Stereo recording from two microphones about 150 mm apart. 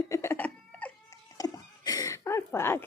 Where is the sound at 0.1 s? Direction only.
15° left (ahead or behind).